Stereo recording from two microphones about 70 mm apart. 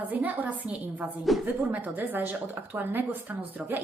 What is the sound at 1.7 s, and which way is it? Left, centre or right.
A woman's voice, right.